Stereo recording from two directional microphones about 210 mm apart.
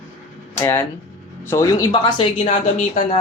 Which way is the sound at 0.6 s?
10° left (ahead or behind).